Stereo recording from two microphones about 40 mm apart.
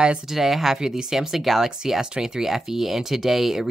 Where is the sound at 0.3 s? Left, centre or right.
Centre.